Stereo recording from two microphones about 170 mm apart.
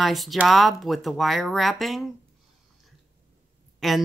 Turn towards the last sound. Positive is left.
turn(degrees=0)  # may be behind; listen again after turning